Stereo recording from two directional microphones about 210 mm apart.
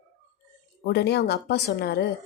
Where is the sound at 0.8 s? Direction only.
50° left (ahead or behind).